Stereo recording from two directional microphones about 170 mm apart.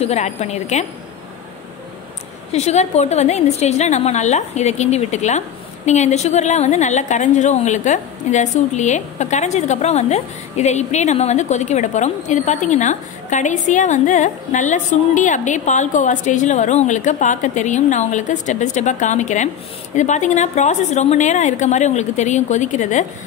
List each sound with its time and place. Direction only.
0.0 s a woman's voice: 40° left (ahead or behind)
2.5 s a woman's voice: 40° left (ahead or behind)